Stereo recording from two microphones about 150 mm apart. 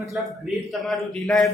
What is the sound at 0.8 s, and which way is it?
Speech, centre (ahead or behind).